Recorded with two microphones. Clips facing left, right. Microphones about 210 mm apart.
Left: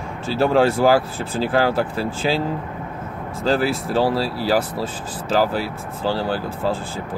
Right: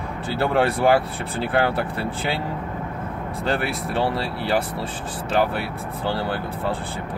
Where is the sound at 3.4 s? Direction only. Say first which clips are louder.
Left 5 dB; 30° left (ahead or behind).